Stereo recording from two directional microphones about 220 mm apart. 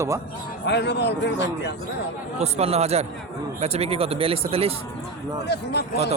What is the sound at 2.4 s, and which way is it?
Speech, 30° right (ahead or behind).